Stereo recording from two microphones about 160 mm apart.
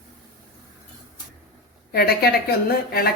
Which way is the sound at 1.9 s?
75° left (ahead or behind).